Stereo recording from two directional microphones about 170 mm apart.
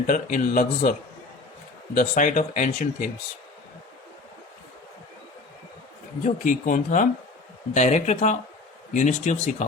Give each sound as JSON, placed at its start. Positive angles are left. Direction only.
{"t": 0.1, "sound": "speech", "side_deg": 50}
{"t": 2.0, "sound": "speech", "side_deg": 50}
{"t": 6.2, "sound": "speech", "side_deg": 50}